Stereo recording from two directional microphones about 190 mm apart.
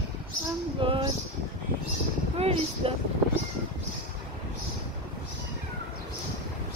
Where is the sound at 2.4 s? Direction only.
30° right (ahead or behind).